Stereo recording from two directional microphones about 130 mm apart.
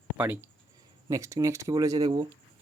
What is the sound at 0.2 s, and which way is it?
Speech, 15° right (ahead or behind).